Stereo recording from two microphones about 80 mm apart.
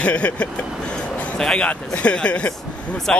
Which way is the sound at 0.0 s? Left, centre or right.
Centre.